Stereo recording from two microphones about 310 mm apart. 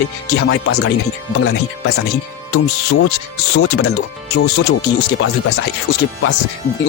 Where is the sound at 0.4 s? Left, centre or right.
Left.